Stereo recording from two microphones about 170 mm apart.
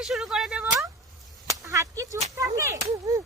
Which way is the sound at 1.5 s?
20° right (ahead or behind).